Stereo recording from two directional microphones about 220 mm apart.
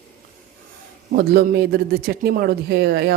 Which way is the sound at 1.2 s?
45° right (ahead or behind).